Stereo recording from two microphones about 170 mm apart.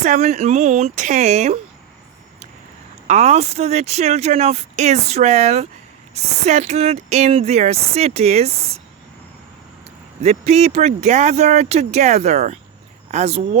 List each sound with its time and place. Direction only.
0.0 s speech: 45° right (ahead or behind)
3.1 s speech: 40° right (ahead or behind)
10.2 s speech: 40° right (ahead or behind)